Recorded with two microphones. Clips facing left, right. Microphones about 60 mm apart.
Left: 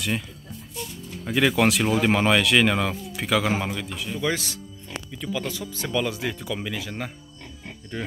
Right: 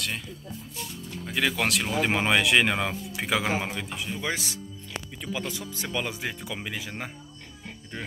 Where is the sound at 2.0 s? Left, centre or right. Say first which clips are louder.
Left 1 dB; centre.